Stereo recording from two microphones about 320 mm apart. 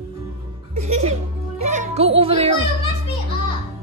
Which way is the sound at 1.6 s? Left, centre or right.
Right.